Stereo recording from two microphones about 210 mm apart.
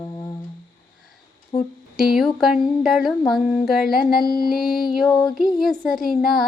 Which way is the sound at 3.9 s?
45° left (ahead or behind).